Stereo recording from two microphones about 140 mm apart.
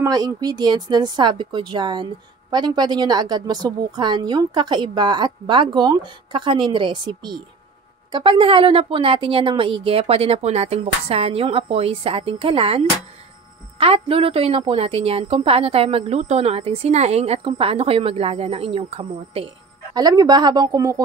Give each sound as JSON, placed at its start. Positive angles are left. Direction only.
{"t": 0.0, "sound": "a woman's voice", "side_deg": -25}
{"t": 19.9, "sound": "a woman's voice", "side_deg": -30}